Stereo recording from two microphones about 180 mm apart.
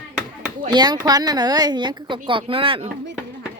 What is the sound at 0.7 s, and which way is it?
Speech, 25° right (ahead or behind).